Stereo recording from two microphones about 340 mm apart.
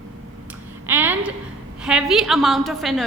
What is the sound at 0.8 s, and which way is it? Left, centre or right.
A woman's voice, centre.